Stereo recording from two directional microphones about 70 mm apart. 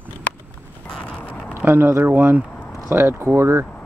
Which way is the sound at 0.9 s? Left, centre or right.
Centre.